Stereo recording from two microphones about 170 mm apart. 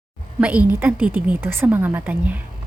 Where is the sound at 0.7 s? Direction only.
10° right (ahead or behind).